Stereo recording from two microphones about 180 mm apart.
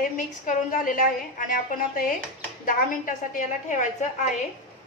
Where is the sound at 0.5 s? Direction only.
45° left (ahead or behind).